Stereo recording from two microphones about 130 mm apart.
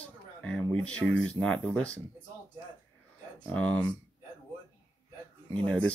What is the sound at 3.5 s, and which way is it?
Speech, 10° left (ahead or behind).